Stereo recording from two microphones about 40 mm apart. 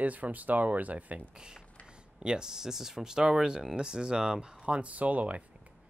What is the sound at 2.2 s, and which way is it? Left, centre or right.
Speech, centre.